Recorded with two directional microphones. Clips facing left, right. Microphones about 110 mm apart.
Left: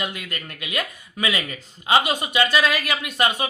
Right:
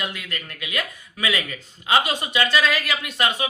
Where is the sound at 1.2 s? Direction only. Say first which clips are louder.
Even; 15° left (ahead or behind).